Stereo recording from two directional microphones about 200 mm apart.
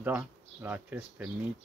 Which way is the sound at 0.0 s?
10° right (ahead or behind).